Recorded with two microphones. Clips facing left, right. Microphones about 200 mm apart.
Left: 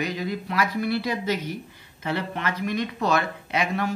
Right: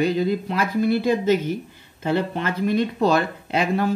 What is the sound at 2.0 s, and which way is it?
Speech, 30° right (ahead or behind).